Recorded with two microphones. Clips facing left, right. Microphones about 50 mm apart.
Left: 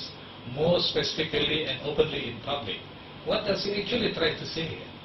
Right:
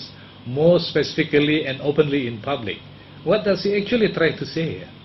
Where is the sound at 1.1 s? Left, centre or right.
Right.